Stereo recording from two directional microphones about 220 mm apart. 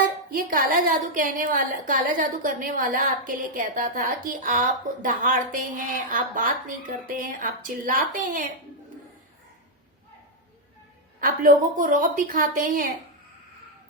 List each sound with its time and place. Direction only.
0.3 s a woman's voice: 40° right (ahead or behind)
11.2 s a woman's voice: 40° right (ahead or behind)